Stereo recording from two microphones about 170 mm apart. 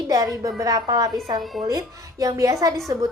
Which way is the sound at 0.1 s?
20° right (ahead or behind).